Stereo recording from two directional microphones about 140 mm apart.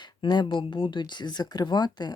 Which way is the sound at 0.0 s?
30° left (ahead or behind).